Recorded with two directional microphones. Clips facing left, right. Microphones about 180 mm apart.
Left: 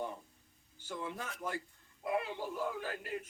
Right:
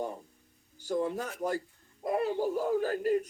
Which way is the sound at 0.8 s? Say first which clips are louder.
Right 11 dB; 40° right (ahead or behind).